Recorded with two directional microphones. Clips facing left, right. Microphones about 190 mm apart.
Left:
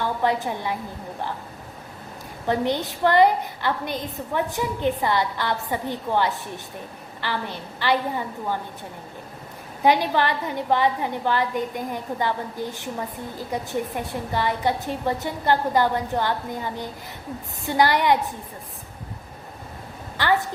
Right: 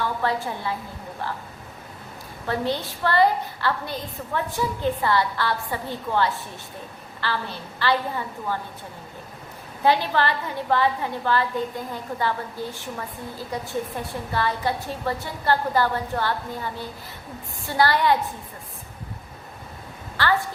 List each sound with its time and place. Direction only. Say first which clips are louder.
0.0 s a woman's voice: left 2 dB; 15° left (ahead or behind)
2.5 s a woman's voice: left 3 dB; 15° left (ahead or behind)
9.8 s a woman's voice: left 1 dB; 15° left (ahead or behind)
20.2 s a woman's voice: left 1 dB; 20° left (ahead or behind)